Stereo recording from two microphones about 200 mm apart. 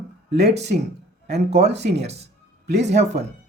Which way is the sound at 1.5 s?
35° right (ahead or behind).